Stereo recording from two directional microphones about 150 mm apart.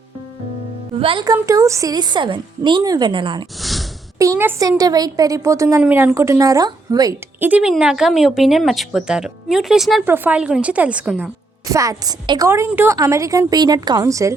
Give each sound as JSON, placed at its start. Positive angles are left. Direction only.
{"t": 0.9, "sound": "speech", "side_deg": -40}
{"t": 1.2, "sound": "speech", "side_deg": -25}
{"t": 3.6, "sound": "sigh", "side_deg": 0}
{"t": 4.2, "sound": "speech", "side_deg": -20}
{"t": 5.8, "sound": "speech", "side_deg": -10}
{"t": 7.3, "sound": "a woman's voice", "side_deg": -10}
{"t": 11.7, "sound": "speech", "side_deg": -20}
{"t": 12.5, "sound": "speech", "side_deg": -15}